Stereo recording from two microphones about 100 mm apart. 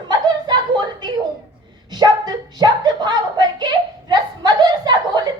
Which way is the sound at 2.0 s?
45° right (ahead or behind).